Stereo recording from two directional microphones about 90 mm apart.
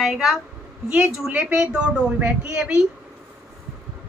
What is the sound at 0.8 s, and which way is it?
A woman's voice, 15° right (ahead or behind).